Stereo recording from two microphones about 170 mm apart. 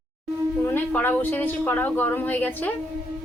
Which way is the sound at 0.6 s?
10° left (ahead or behind).